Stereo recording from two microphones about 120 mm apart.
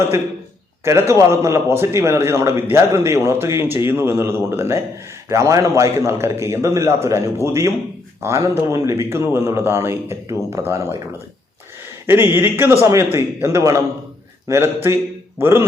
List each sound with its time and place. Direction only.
0.9 s a man's voice: 25° right (ahead or behind)
12.0 s a man's voice: 20° right (ahead or behind)